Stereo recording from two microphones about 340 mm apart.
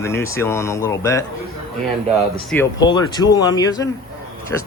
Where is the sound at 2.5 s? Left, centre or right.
Centre.